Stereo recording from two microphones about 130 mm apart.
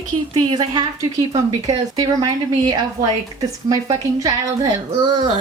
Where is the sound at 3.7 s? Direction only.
25° right (ahead or behind).